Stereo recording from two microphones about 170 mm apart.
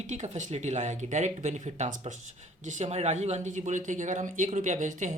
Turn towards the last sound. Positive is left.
turn(degrees=-45)  # may be behind; listen again after turning